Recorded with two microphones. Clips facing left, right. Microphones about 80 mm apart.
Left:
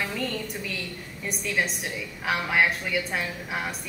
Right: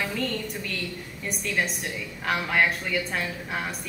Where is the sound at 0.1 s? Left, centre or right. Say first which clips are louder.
Right 1 dB; centre.